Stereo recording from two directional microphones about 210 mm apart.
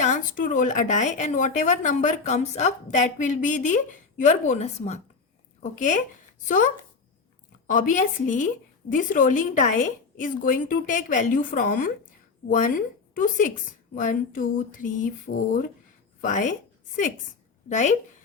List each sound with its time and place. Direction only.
0.0 s a woman's voice: 35° left (ahead or behind)
7.7 s a woman's voice: 35° left (ahead or behind)
17.7 s a woman's voice: 35° left (ahead or behind)